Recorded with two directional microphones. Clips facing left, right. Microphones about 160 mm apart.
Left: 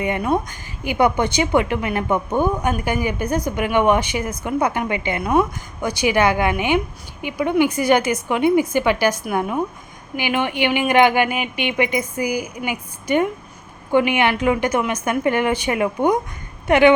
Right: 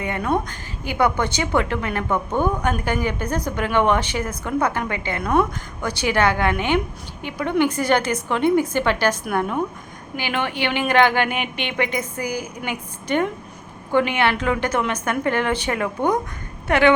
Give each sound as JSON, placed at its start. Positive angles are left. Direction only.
{"t": 0.0, "sound": "a woman's voice", "side_deg": 15}